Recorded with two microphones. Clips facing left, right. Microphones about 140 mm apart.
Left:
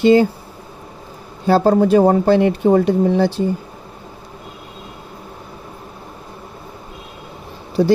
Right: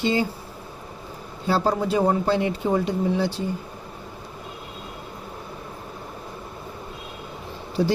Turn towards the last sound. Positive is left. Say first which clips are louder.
# left 8 dB
turn(degrees=40)  # may be behind; listen again after turning